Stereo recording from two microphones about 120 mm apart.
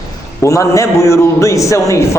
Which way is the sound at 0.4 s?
25° left (ahead or behind).